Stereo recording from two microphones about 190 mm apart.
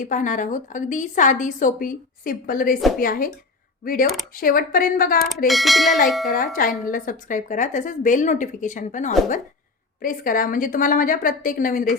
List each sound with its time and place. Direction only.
0.0 s speech: 40° left (ahead or behind)
4.4 s speech: 50° left (ahead or behind)
5.5 s speech: centre (ahead or behind)
6.3 s speech: 45° left (ahead or behind)